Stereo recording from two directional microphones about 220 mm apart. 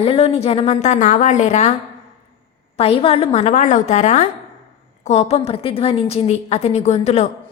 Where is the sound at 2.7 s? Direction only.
25° left (ahead or behind).